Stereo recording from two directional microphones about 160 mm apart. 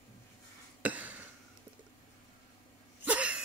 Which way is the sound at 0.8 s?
10° right (ahead or behind).